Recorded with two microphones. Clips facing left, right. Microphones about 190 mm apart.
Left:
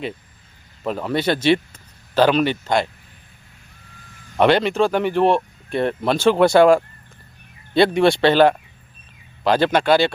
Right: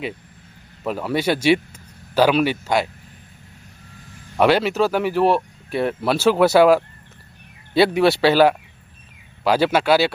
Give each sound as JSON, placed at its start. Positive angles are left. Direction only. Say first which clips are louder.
{"t": 0.9, "sound": "speech", "louder": "even", "side_deg": -5}
{"t": 4.4, "sound": "speech", "louder": "left 1 dB", "side_deg": -5}
{"t": 7.9, "sound": "speech", "louder": "left 1 dB", "side_deg": -5}